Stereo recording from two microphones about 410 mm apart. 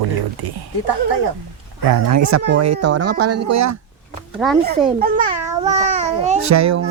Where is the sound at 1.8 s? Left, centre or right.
Right.